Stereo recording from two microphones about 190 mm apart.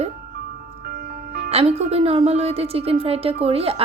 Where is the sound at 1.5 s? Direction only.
35° right (ahead or behind).